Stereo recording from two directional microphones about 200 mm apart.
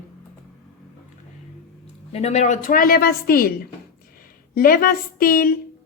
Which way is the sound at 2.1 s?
35° left (ahead or behind).